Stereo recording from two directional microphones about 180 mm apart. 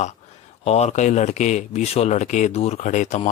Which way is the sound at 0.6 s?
35° left (ahead or behind).